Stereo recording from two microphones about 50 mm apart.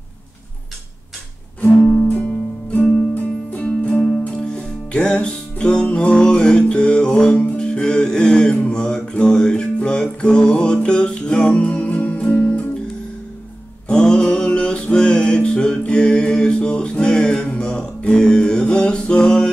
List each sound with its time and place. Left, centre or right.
2.0 s music: left
13.8 s music: centre